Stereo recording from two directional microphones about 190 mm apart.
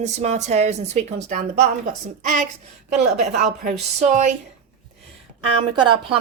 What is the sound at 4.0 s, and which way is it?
Speech, 35° right (ahead or behind).